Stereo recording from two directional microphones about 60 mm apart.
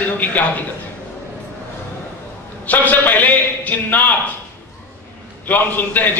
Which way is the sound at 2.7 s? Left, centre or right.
Left.